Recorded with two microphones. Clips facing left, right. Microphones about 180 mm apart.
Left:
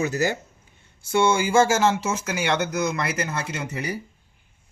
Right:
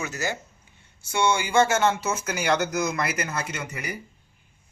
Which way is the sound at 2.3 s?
25° left (ahead or behind).